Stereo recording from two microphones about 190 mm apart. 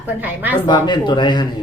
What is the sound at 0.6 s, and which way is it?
Speech, 25° left (ahead or behind).